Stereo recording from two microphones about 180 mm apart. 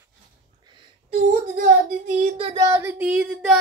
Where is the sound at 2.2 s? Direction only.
35° right (ahead or behind); by 3.6 s 5° right (ahead or behind).